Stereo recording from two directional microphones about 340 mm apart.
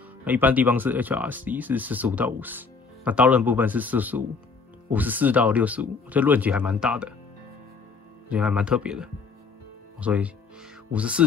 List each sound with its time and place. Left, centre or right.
0.2 s speech: centre
8.3 s speech: centre